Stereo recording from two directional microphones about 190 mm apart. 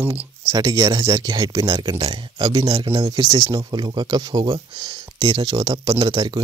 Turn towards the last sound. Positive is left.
turn(degrees=-25)  # may be behind; listen again after turning